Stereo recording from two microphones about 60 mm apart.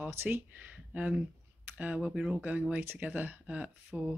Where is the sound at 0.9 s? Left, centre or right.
Centre.